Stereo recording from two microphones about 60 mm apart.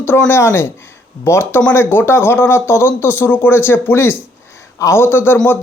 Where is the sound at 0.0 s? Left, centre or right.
Left.